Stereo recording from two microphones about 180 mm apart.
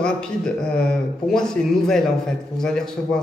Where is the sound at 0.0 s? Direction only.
5° left (ahead or behind).